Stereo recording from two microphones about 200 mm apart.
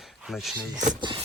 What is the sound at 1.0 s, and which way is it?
Rub, 25° right (ahead or behind).